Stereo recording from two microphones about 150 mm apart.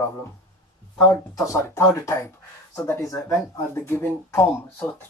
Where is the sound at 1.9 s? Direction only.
20° left (ahead or behind).